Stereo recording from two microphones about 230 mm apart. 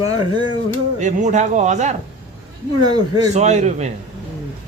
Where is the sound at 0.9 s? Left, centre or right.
Right.